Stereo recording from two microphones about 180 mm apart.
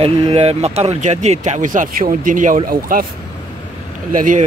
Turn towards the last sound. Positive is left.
turn(degrees=-45)  # may be behind; listen again after turning